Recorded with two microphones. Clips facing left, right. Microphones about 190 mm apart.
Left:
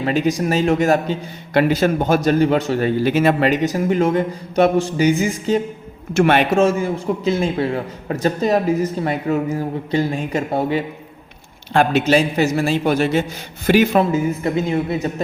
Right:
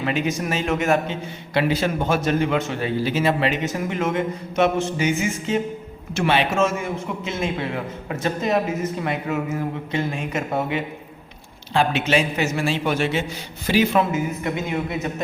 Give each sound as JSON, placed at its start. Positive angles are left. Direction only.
{"t": 0.0, "sound": "a man's voice", "side_deg": 35}
{"t": 3.0, "sound": "speech", "side_deg": 55}
{"t": 3.5, "sound": "a man's voice", "side_deg": 35}
{"t": 6.1, "sound": "a man's voice", "side_deg": 50}
{"t": 6.5, "sound": "a man's voice", "side_deg": 35}
{"t": 11.7, "sound": "a man's voice", "side_deg": 45}